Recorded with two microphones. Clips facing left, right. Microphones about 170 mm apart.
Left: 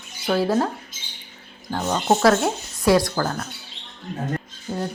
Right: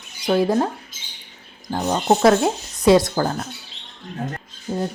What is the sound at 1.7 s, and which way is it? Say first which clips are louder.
Speech: right 2 dB; 15° right (ahead or behind).